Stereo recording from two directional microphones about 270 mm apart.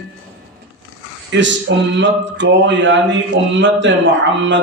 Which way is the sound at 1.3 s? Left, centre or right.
Right.